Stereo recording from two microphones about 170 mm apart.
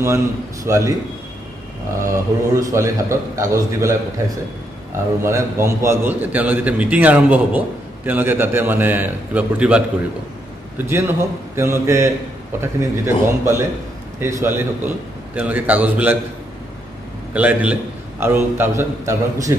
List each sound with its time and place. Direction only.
0.7 s a man's voice: 20° right (ahead or behind)
2.0 s a man's voice: 20° right (ahead or behind)
5.2 s a man's voice: 15° right (ahead or behind)
17.3 s a man's voice: 10° right (ahead or behind)